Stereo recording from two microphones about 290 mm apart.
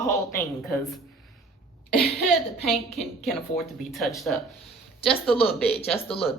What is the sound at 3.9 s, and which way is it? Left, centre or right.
Speech, centre.